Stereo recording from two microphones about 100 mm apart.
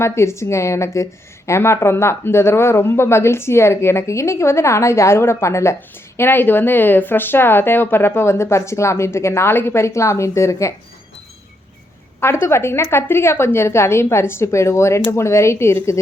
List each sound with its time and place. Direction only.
0.0 s speech: 25° left (ahead or behind)
12.2 s speech: 25° left (ahead or behind)